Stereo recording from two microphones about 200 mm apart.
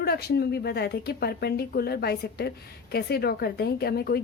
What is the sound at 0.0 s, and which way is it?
A woman's voice, 50° left (ahead or behind).